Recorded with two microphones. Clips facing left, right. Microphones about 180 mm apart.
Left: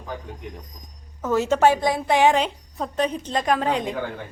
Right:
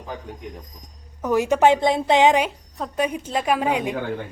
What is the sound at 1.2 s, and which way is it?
A woman's voice, 15° right (ahead or behind).